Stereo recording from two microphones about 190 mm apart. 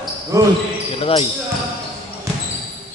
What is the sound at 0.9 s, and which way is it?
Speech, 30° left (ahead or behind).